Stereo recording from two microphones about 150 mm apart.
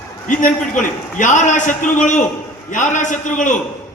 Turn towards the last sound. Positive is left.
turn(degrees=55)  # may be behind; listen again after turning